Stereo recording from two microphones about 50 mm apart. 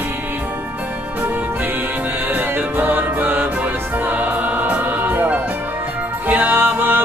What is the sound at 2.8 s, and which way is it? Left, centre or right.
Music, right.